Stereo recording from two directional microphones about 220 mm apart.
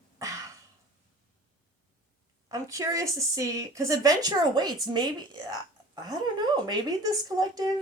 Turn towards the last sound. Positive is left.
turn(degrees=-15)  # may be behind; listen again after turning